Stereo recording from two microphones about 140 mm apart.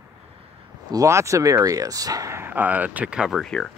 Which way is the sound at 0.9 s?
20° right (ahead or behind).